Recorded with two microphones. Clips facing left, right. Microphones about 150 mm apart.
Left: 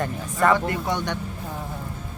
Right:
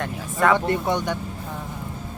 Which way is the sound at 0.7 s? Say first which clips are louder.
Right 3 dB; 20° right (ahead or behind).